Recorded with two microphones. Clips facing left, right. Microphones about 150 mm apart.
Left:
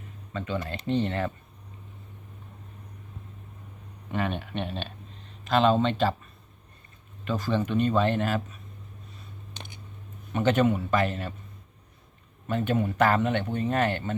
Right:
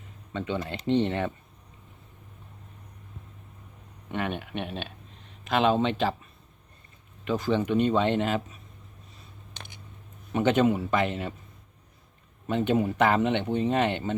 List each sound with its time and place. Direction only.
0.3 s speech: 20° right (ahead or behind)
4.1 s speech: 5° right (ahead or behind)
7.3 s speech: 15° right (ahead or behind)
10.3 s speech: 20° right (ahead or behind)
12.5 s speech: 20° right (ahead or behind)